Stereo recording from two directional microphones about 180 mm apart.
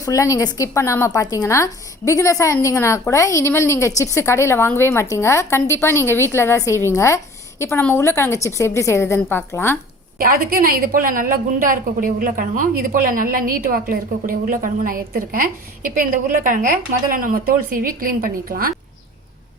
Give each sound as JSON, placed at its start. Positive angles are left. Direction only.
{"t": 0.0, "sound": "a woman's voice", "side_deg": 20}
{"t": 10.2, "sound": "a woman's voice", "side_deg": -50}